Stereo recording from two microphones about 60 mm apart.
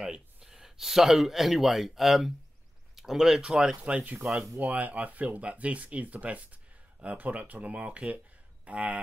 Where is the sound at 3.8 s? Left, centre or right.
Right.